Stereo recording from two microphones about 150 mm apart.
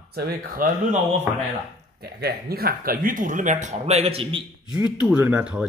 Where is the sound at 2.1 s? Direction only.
90° right; by 4.4 s 40° right (ahead or behind).